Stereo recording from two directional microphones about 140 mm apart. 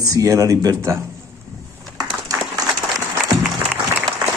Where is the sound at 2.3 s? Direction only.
25° right (ahead or behind).